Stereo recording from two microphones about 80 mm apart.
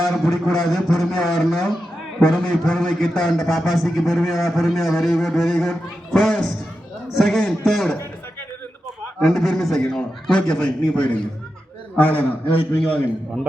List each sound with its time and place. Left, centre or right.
0.0 s a man's voice: centre
9.2 s a man's voice: centre; by 13.0 s left